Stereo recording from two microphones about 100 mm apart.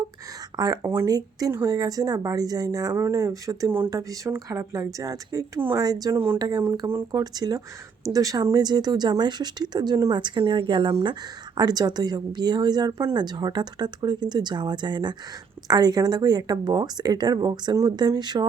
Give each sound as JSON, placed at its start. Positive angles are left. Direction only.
{"t": 0.5, "sound": "a woman's voice", "side_deg": -40}